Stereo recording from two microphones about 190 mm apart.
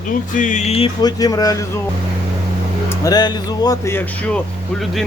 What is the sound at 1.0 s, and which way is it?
Speech, 20° left (ahead or behind).